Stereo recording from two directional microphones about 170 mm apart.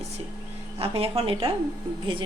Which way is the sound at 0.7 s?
35° right (ahead or behind).